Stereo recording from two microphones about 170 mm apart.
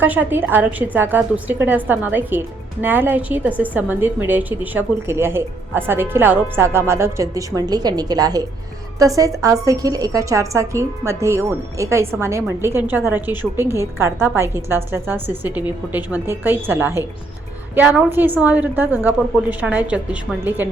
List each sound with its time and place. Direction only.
0.0 s a woman's voice: 10° right (ahead or behind)